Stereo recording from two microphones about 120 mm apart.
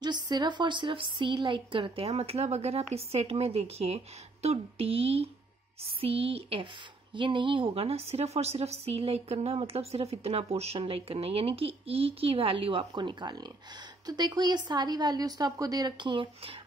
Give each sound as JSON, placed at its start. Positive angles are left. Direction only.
{"t": 0.0, "sound": "a woman's voice", "side_deg": -35}